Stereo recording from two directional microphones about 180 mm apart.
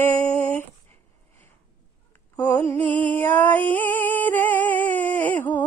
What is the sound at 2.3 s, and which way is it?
Mantra, 10° left (ahead or behind).